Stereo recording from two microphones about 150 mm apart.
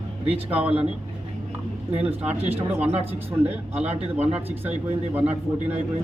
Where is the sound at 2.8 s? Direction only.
45° right (ahead or behind).